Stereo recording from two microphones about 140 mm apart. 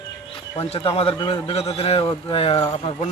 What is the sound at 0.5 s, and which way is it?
A man's voice, 45° left (ahead or behind).